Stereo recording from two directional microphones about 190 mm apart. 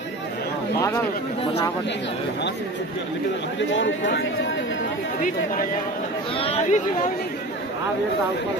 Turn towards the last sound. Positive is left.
turn(degrees=30)  # may be behind; listen again after turning